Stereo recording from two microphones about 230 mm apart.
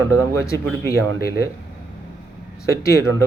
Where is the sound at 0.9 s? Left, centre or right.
Left.